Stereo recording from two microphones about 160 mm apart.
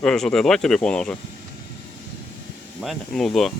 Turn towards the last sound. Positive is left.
turn(degrees=0)  # may be behind; listen again after turning